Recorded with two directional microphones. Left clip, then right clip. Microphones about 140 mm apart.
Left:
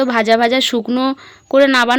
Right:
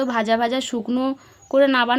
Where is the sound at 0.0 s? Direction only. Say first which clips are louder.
Left 7 dB; 25° left (ahead or behind).